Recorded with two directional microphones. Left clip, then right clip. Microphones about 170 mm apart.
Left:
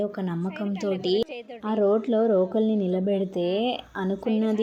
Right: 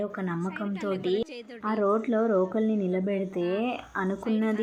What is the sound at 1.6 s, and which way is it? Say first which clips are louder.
Speech: left 3 dB; 30° left (ahead or behind).